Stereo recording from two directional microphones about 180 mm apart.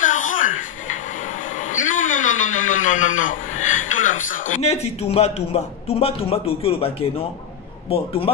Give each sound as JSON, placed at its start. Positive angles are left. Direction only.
{"t": 0.0, "sound": "television", "side_deg": 45}
{"t": 1.5, "sound": "a man's voice", "side_deg": 45}